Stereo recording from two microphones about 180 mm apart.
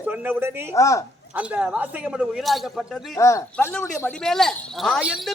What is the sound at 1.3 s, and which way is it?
A woman's voice, 5° right (ahead or behind).